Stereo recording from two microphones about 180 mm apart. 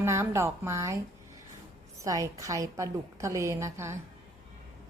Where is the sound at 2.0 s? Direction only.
15° right (ahead or behind).